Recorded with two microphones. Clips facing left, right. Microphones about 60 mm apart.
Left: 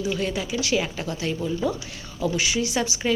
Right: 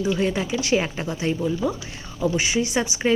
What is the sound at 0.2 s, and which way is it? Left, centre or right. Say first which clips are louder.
Speech: right 3 dB; right.